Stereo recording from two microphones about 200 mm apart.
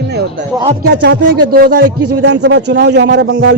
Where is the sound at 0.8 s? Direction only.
55° right (ahead or behind).